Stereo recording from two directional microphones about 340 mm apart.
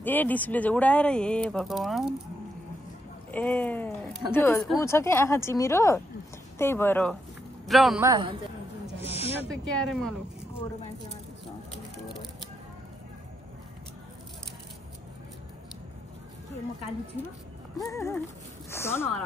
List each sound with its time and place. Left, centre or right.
0.0 s speech: centre
3.3 s speech: centre
9.0 s snake: centre
9.4 s speech: centre
17.7 s speech: centre